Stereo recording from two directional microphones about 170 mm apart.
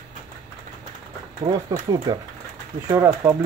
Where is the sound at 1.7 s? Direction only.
25° right (ahead or behind).